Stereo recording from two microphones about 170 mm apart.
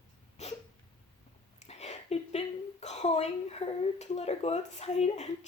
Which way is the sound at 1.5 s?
40° left (ahead or behind).